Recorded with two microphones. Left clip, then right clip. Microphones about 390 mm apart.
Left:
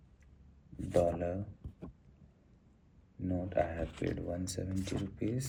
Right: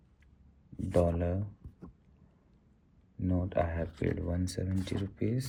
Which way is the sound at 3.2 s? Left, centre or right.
Right.